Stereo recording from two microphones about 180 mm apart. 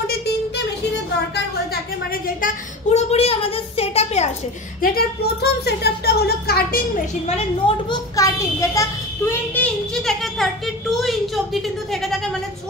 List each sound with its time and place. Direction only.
2.4 s a sound: 35° left (ahead or behind)
4.8 s a woman's voice: 60° left (ahead or behind)
7.2 s a woman's voice: 35° left (ahead or behind)
8.2 s a child's voice: 15° left (ahead or behind); by 12.2 s centre (ahead or behind)